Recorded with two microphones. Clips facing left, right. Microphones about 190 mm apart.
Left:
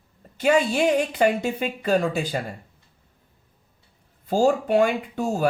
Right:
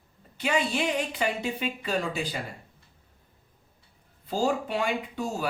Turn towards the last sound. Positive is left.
turn(degrees=50)  # may be behind; listen again after turning